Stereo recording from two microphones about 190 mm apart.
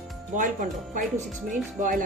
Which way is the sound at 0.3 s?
45° right (ahead or behind).